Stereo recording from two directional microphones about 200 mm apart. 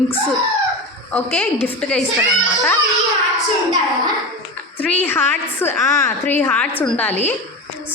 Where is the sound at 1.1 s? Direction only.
10° left (ahead or behind).